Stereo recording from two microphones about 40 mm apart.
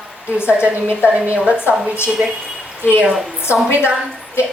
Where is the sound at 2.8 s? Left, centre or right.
Left.